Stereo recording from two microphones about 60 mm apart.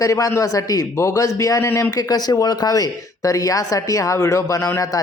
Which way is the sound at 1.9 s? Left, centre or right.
Left.